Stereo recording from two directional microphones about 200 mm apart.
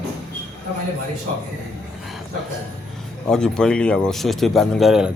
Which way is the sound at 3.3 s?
5° left (ahead or behind).